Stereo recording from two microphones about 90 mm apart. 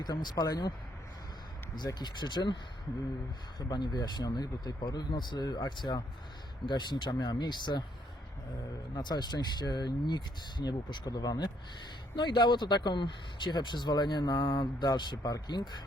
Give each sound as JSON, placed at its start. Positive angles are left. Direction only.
{"t": 0.0, "sound": "speech", "side_deg": 50}
{"t": 2.0, "sound": "speech", "side_deg": 55}
{"t": 3.7, "sound": "speech", "side_deg": 50}
{"t": 9.0, "sound": "speech", "side_deg": 55}